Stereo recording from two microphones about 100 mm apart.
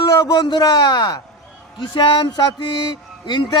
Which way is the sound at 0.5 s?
45° left (ahead or behind).